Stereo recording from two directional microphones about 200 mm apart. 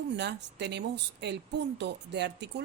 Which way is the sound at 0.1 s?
60° right (ahead or behind).